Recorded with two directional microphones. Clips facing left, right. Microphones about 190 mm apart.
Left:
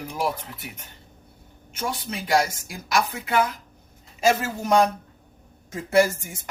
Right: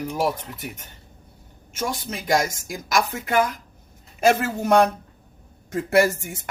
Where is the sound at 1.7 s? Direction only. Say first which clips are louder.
Right 2 dB; 45° right (ahead or behind).